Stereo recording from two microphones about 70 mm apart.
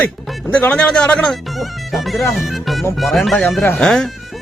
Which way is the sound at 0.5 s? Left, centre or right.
Centre.